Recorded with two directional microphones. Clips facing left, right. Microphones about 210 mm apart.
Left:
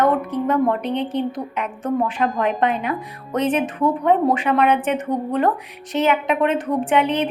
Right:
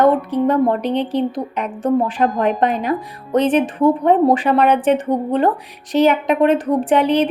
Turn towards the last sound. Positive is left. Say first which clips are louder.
# right 4 dB
turn(degrees=-35)  # may be behind; listen again after turning